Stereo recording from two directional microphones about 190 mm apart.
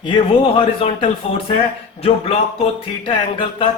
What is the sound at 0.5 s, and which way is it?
Speech, 30° left (ahead or behind).